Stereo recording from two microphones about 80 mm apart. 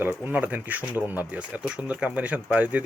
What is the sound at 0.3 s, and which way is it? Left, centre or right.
Speech, right.